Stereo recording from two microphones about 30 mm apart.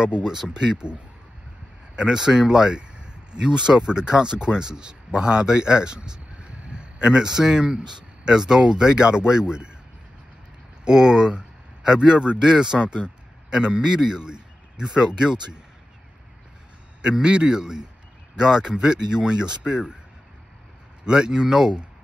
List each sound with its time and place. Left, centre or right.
0.0 s speech: right
2.0 s speech: right
2.8 s speech: right
6.3 s a sound: right
6.7 s a sound: right
7.2 s speech: right
10.9 s a man's voice: right
13.8 s speech: centre
14.2 s a sound: right
15.0 s speech: right
17.0 s speech: right
17.6 s speech: centre
21.0 s speech: right